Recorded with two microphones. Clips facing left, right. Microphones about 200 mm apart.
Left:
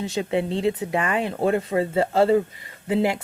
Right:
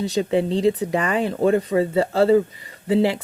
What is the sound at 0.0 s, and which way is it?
Speech, 35° right (ahead or behind).